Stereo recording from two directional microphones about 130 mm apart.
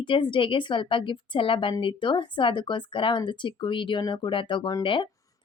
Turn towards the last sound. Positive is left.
turn(degrees=40)  # may be behind; listen again after turning